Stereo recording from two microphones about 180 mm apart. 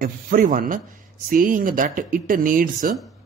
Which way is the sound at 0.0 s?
50° right (ahead or behind).